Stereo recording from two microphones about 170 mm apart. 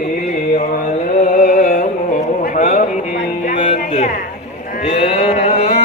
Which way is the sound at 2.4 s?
45° left (ahead or behind).